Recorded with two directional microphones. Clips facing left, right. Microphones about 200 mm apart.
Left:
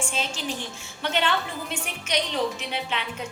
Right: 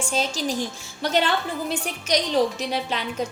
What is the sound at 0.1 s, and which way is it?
A woman's voice, 40° right (ahead or behind).